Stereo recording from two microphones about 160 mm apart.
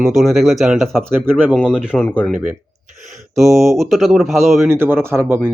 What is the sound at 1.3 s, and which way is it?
Speech, 10° right (ahead or behind).